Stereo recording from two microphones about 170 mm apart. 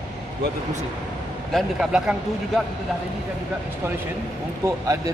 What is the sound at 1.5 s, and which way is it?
Speech, centre (ahead or behind).